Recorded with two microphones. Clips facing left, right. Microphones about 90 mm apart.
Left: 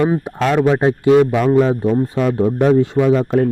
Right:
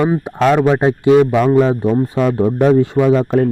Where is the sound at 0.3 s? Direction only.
25° right (ahead or behind).